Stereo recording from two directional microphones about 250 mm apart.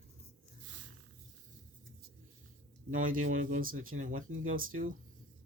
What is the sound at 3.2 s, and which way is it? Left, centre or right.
Speech, right.